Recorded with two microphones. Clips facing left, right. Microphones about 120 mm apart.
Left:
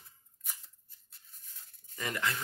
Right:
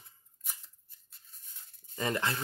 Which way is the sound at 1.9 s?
30° right (ahead or behind).